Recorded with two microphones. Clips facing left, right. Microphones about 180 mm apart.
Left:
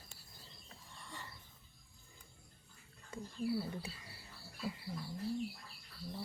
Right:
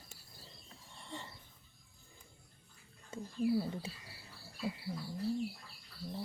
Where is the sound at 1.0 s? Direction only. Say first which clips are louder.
Right 5 dB; 25° right (ahead or behind).